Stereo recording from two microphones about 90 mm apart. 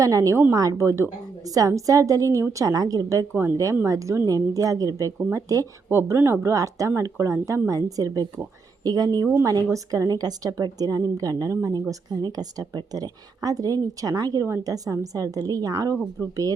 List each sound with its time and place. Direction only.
0.0 s a woman's voice: 40° right (ahead or behind)
5.9 s a woman's voice: 30° right (ahead or behind); by 9.2 s 45° right (ahead or behind)
9.2 s a woman's voice: 35° right (ahead or behind)